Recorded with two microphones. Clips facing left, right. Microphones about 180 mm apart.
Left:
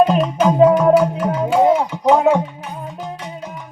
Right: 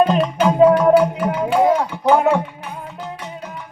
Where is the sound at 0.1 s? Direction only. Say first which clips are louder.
Left 1 dB; 5° left (ahead or behind).